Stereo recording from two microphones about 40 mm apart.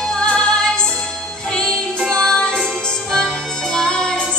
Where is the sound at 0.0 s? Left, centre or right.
Centre.